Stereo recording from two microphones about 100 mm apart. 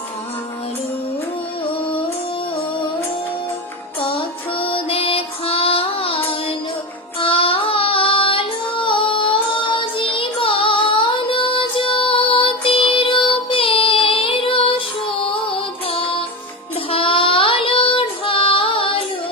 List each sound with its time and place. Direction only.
4.0 s music: 60° left (ahead or behind)
7.2 s child singing: 65° left (ahead or behind)